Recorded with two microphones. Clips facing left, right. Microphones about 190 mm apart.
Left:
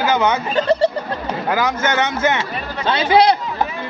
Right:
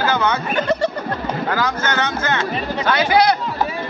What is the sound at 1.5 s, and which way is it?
Speech, 20° left (ahead or behind).